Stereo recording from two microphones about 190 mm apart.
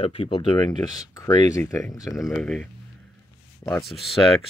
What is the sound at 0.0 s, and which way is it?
Speech, 30° left (ahead or behind).